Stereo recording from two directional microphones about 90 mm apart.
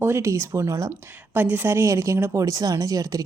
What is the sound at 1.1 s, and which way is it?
Speech, 20° right (ahead or behind).